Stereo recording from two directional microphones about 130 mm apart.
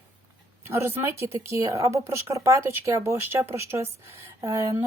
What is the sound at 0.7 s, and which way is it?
Speech, 20° right (ahead or behind).